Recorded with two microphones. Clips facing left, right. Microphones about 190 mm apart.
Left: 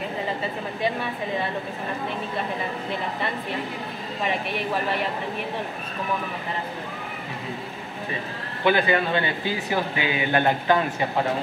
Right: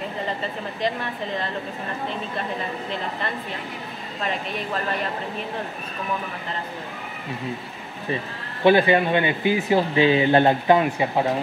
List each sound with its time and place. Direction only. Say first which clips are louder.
8.6 s speech: right 4 dB; 25° right (ahead or behind)
10.8 s speech: right 3 dB; 15° right (ahead or behind)